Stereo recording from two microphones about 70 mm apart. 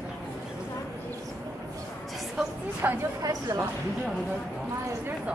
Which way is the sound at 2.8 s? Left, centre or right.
Right.